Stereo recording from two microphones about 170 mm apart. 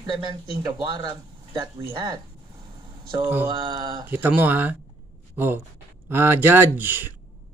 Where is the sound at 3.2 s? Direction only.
15° right (ahead or behind).